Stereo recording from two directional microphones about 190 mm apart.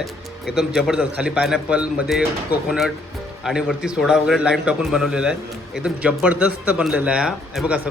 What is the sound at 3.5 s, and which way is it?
A man's voice, 5° right (ahead or behind).